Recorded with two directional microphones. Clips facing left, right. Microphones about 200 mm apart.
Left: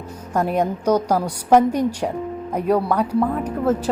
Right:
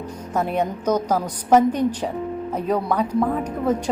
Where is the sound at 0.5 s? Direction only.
10° left (ahead or behind).